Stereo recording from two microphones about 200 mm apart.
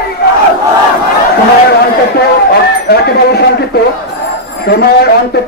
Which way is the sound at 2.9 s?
55° left (ahead or behind).